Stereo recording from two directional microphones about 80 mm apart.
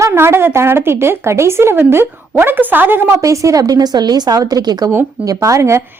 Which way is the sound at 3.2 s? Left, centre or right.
Right.